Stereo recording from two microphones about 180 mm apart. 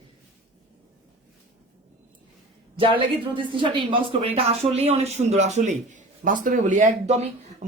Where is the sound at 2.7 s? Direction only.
30° right (ahead or behind).